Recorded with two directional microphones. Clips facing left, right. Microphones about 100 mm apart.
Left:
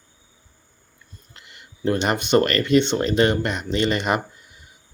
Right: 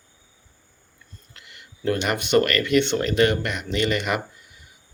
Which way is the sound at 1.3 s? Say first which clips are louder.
Left 1 dB; 25° left (ahead or behind).